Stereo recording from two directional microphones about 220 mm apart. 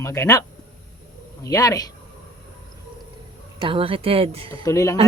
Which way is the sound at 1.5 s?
15° left (ahead or behind).